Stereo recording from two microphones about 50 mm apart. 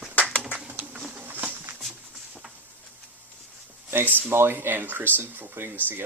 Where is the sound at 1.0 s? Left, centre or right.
Right.